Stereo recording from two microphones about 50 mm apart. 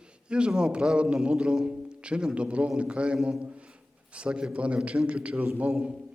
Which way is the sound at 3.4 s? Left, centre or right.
Right.